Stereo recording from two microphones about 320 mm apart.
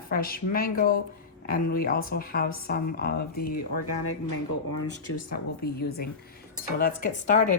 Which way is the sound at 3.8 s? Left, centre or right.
Left.